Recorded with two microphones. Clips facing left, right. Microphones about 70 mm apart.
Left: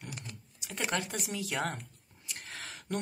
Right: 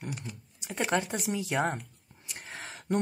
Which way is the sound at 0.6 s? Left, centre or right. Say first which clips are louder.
Right 6 dB; centre.